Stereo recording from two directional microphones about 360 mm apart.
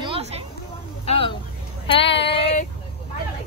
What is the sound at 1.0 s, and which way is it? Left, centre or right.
Speech, centre.